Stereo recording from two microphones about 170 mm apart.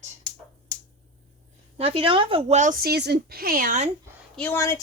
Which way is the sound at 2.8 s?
70° right (ahead or behind).